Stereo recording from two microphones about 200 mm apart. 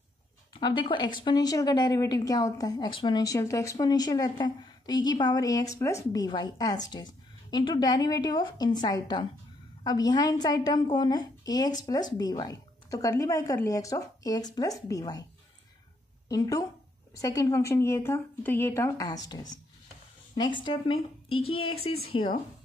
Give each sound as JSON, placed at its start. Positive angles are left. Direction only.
{"t": 0.5, "sound": "a woman's voice", "side_deg": 20}
{"t": 16.3, "sound": "a woman's voice", "side_deg": 15}